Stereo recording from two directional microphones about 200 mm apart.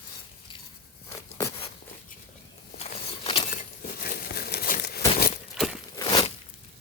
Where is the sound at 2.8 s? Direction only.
30° left (ahead or behind).